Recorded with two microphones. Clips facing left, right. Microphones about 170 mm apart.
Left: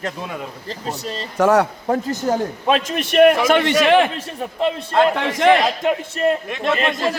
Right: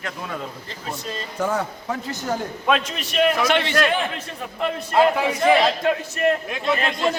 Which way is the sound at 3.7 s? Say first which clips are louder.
Left 7 dB; 90° left.